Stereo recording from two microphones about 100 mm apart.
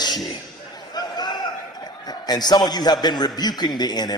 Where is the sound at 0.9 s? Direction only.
45° left (ahead or behind).